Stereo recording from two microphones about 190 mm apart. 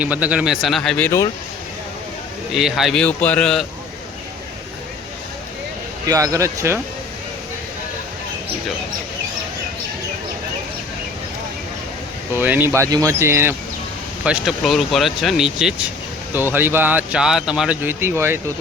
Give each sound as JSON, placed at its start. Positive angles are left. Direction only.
{"t": 0.0, "sound": "speech", "side_deg": -5}
{"t": 2.5, "sound": "speech", "side_deg": 0}
{"t": 6.1, "sound": "speech", "side_deg": -15}
{"t": 12.3, "sound": "speech", "side_deg": -10}